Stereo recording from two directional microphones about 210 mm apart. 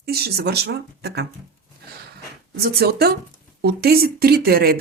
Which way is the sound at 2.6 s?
50° right (ahead or behind).